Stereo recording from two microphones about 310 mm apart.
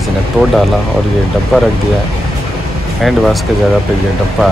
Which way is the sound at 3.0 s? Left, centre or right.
Centre.